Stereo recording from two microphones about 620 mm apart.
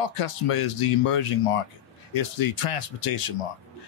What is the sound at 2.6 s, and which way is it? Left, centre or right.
Speech, left.